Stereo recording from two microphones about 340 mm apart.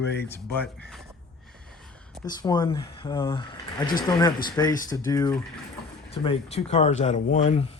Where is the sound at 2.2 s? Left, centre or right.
Centre.